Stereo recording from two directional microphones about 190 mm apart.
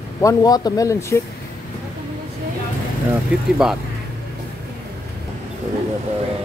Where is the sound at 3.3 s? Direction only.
5° right (ahead or behind).